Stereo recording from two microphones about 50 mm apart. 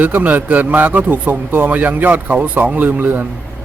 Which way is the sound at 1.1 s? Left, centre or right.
Right.